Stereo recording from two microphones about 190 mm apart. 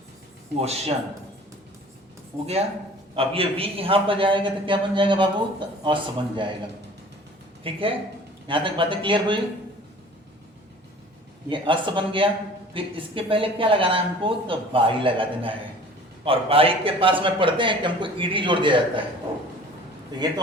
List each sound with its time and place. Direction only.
0.6 s speech: 35° right (ahead or behind)
3.2 s a man's voice: 30° right (ahead or behind)
7.6 s a man's voice: 30° right (ahead or behind)
11.4 s a man's voice: 25° right (ahead or behind)
20.1 s a man's voice: 20° right (ahead or behind)